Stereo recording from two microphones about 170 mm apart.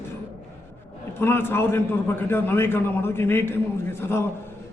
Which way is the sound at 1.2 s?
15° left (ahead or behind).